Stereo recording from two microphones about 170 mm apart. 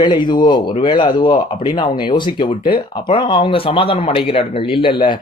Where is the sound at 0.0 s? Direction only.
25° left (ahead or behind).